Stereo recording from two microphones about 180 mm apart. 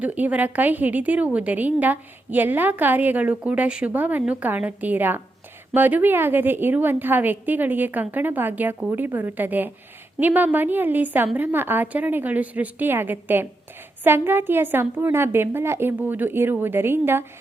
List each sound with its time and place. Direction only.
0.0 s a woman's voice: 10° right (ahead or behind)